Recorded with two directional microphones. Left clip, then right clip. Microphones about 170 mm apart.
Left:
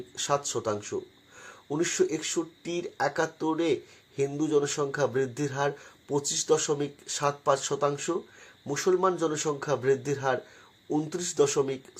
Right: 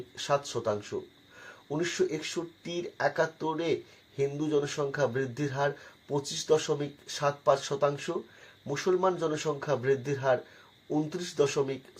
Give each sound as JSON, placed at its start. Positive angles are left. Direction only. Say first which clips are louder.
{"t": 0.2, "sound": "speech", "louder": "left 1 dB", "side_deg": 25}